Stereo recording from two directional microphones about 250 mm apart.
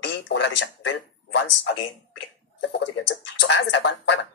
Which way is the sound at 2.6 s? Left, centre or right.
Left.